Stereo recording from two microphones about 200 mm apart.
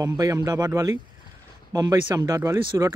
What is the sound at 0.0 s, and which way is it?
Speech, 15° right (ahead or behind).